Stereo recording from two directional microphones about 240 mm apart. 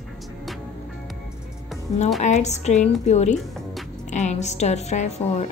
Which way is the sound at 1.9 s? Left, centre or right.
Left.